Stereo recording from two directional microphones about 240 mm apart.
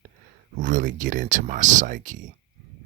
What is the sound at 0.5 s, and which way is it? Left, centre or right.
Speech, right.